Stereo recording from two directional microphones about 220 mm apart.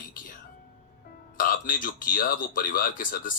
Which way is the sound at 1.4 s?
40° left (ahead or behind).